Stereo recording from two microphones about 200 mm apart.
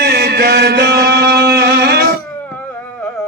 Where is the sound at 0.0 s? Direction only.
55° right (ahead or behind).